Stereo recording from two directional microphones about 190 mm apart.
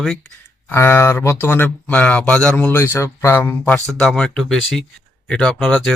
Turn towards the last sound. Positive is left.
turn(degrees=0)  # may be behind; listen again after turning